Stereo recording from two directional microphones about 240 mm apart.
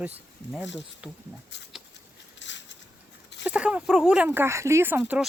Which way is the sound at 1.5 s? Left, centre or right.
Left.